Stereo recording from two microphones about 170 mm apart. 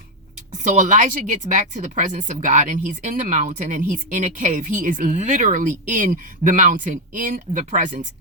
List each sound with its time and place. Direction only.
0.6 s speech: 45° right (ahead or behind)